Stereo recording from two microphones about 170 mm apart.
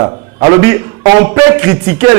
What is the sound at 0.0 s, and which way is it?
A man's voice, 20° right (ahead or behind).